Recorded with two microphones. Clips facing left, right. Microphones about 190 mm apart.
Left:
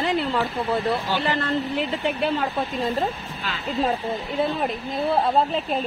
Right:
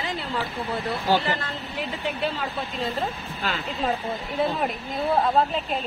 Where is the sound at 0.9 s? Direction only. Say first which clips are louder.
Even; 65° left (ahead or behind).